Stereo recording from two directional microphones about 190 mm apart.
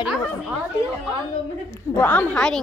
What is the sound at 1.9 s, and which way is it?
Speech, 10° left (ahead or behind).